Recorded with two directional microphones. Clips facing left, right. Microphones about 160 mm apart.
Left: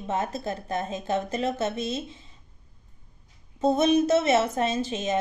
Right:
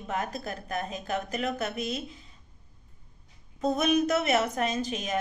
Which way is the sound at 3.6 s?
25° left (ahead or behind).